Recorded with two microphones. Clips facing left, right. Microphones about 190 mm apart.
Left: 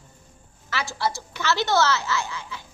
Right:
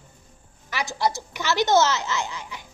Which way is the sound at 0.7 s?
15° right (ahead or behind).